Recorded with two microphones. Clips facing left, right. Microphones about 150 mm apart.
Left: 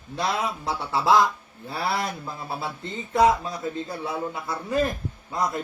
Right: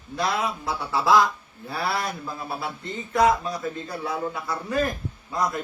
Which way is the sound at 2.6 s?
25° left (ahead or behind).